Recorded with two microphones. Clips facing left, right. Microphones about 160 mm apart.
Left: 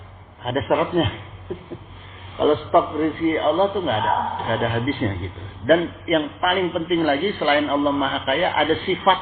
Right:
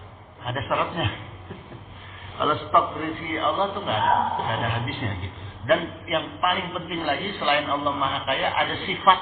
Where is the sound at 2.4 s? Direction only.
40° left (ahead or behind).